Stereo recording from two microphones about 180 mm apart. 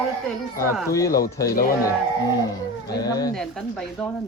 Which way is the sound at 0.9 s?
20° left (ahead or behind).